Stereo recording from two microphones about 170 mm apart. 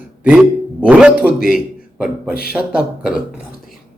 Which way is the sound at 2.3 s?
60° left (ahead or behind).